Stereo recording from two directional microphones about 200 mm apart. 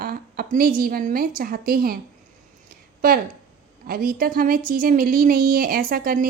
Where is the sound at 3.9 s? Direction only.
45° right (ahead or behind).